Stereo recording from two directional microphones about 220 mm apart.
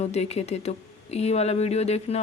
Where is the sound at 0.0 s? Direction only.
30° left (ahead or behind).